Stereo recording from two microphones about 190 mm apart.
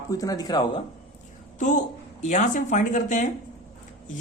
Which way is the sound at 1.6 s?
40° left (ahead or behind).